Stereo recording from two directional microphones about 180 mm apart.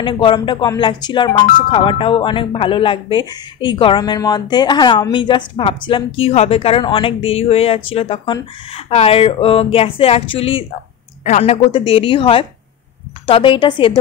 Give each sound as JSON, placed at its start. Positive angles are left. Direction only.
{"t": 0.0, "sound": "a woman's voice", "side_deg": 25}